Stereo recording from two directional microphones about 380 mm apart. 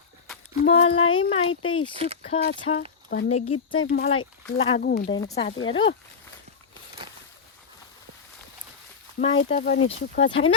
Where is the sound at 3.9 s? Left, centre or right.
Centre.